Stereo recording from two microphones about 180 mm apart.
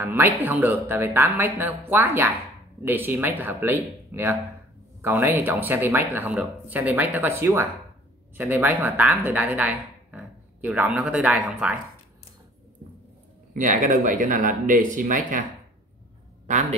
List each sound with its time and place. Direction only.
0.0 s speech: 10° right (ahead or behind)
13.5 s speech: 45° right (ahead or behind)